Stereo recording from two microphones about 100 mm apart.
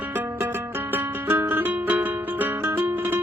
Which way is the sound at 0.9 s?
20° right (ahead or behind).